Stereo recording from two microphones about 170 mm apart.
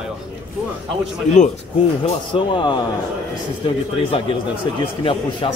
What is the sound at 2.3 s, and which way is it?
Speech, 30° left (ahead or behind).